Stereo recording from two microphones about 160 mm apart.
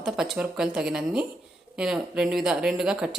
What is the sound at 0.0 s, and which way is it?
Speech, 5° right (ahead or behind).